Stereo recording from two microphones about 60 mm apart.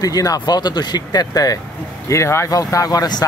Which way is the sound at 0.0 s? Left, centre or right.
Left.